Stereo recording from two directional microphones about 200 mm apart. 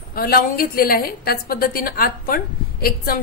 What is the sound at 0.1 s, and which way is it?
A woman's voice, 50° left (ahead or behind).